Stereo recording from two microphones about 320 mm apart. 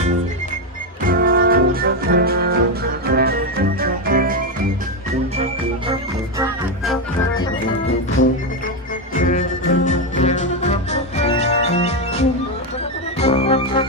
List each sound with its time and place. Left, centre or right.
1.0 s music: right
7.9 s music: left
9.1 s music: left